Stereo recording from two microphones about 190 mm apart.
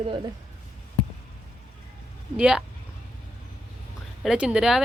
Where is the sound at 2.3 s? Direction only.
5° right (ahead or behind).